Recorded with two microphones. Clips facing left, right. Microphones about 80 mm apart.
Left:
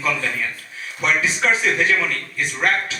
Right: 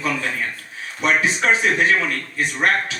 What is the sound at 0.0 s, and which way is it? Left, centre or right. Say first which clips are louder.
A man's voice: even; right.